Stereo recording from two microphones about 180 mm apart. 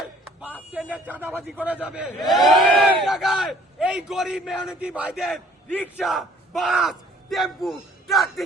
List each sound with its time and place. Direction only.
0.7 s a man's voice: 5° right (ahead or behind)